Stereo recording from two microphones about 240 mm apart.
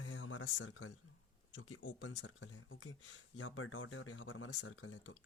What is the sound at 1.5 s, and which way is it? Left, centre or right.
Speech, left.